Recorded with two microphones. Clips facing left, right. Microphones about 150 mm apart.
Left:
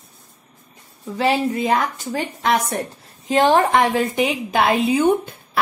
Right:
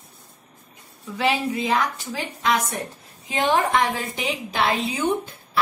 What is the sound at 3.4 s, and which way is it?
A woman's voice, 65° left (ahead or behind).